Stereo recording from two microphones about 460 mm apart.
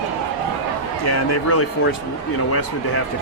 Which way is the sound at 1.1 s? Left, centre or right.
Left.